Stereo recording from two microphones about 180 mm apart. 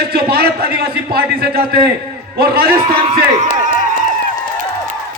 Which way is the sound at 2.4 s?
60° right (ahead or behind).